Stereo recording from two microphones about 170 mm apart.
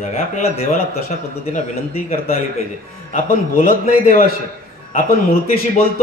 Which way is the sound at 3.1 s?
50° left (ahead or behind).